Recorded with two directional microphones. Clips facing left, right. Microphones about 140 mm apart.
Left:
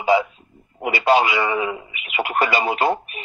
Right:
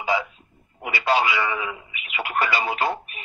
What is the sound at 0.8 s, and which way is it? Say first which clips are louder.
Speech: left 5 dB; 20° left (ahead or behind).